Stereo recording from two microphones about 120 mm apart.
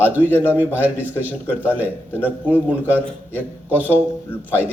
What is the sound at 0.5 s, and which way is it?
A man's voice, 15° right (ahead or behind).